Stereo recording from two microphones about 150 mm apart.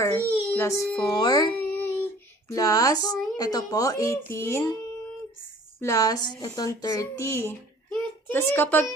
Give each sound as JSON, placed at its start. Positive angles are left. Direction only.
{"t": 0.0, "sound": "a child's voice", "side_deg": 15}
{"t": 1.6, "sound": "child singing", "side_deg": 10}
{"t": 2.6, "sound": "speech", "side_deg": 25}
{"t": 5.8, "sound": "speech", "side_deg": 20}
{"t": 7.9, "sound": "a sound", "side_deg": 15}